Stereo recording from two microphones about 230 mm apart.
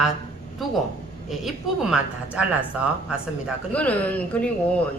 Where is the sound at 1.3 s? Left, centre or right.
Centre.